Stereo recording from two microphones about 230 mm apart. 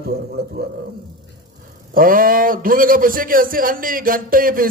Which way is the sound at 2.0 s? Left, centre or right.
Right.